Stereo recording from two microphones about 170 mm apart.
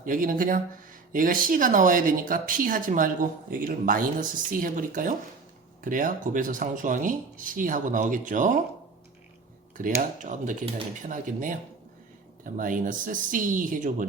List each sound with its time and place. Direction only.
0.0 s speech: 55° right (ahead or behind)
9.7 s speech: 50° right (ahead or behind)
12.5 s speech: 50° right (ahead or behind)